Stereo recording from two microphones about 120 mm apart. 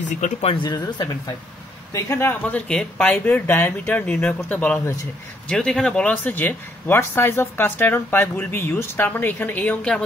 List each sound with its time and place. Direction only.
0.0 s speech: 85° left
0.5 s speech: 40° left (ahead or behind)
2.0 s speech: 20° left (ahead or behind)